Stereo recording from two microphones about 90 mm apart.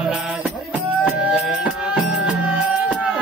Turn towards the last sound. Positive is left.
turn(degrees=-15)  # may be behind; listen again after turning